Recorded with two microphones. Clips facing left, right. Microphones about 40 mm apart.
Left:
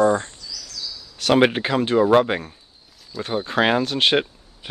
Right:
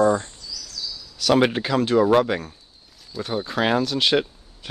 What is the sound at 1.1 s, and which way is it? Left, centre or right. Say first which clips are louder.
Speech: left 1 dB; left.